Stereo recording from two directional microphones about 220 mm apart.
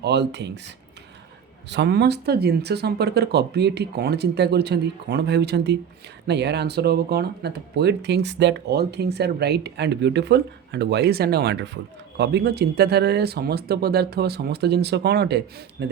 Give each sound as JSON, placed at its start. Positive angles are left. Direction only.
{"t": 0.0, "sound": "speech", "side_deg": -50}
{"t": 1.7, "sound": "speech", "side_deg": -50}